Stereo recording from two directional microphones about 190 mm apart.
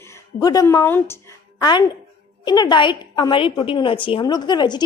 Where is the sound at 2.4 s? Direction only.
20° left (ahead or behind).